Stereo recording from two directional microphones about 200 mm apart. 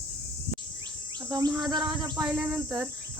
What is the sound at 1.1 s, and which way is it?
Insect, 20° right (ahead or behind).